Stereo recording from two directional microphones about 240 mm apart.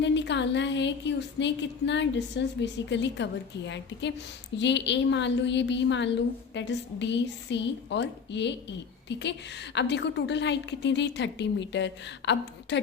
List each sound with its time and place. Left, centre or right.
0.0 s a woman's voice: left